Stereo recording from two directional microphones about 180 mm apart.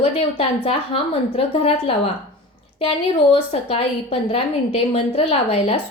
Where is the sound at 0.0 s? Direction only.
35° left (ahead or behind).